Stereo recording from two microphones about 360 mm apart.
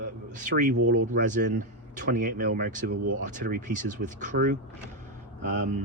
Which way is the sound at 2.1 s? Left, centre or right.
Right.